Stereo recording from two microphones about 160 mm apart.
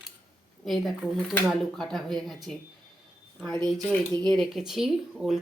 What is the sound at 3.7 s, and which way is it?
Speech, 25° right (ahead or behind).